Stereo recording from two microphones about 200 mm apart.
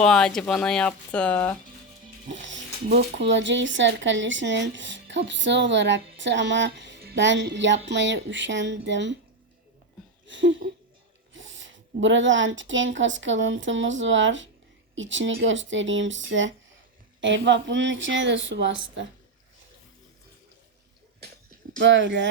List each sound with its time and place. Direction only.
0.0 s speech: 5° left (ahead or behind)
2.3 s speech: 65° right (ahead or behind)
10.2 s speech: 65° right (ahead or behind)
21.8 s speech: 65° right (ahead or behind)